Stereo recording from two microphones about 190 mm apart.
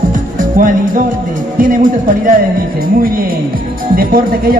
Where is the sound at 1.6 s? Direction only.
45° right (ahead or behind).